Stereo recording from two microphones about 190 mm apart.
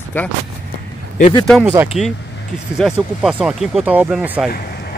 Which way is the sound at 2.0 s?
Centre (ahead or behind).